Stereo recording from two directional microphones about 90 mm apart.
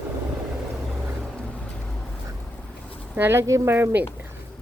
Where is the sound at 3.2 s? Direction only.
25° right (ahead or behind).